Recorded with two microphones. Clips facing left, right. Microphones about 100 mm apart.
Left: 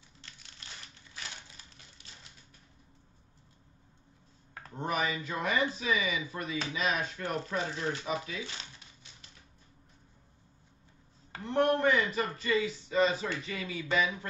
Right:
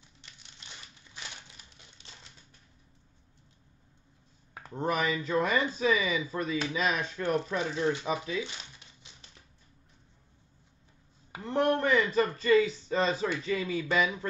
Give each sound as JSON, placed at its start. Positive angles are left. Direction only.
{"t": 0.2, "sound": "crumpling", "side_deg": -20}
{"t": 5.2, "sound": "speech", "side_deg": -35}
{"t": 7.3, "sound": "speech", "side_deg": -20}
{"t": 11.4, "sound": "a sound", "side_deg": -35}
{"t": 11.9, "sound": "speech", "side_deg": -35}